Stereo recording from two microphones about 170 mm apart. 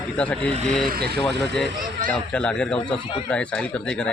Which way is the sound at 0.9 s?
65° right (ahead or behind).